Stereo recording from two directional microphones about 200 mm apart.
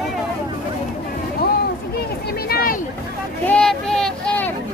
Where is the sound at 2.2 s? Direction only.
50° left (ahead or behind).